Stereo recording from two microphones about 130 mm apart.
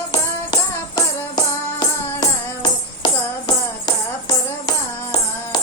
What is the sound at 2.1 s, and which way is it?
Tambourine, 30° left (ahead or behind).